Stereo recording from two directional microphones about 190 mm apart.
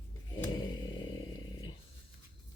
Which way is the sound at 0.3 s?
25° left (ahead or behind).